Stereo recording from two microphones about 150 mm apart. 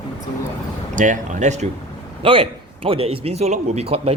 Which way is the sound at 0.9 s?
55° right (ahead or behind).